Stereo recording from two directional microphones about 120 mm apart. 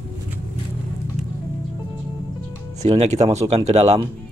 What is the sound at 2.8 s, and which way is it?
Speech, 65° right (ahead or behind).